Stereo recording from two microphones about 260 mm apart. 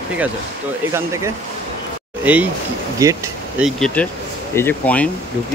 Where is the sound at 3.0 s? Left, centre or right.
Centre.